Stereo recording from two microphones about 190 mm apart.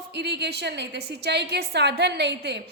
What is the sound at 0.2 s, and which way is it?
A woman's voice, 60° right (ahead or behind).